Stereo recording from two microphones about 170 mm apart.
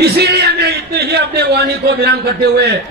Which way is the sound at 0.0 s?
70° right (ahead or behind).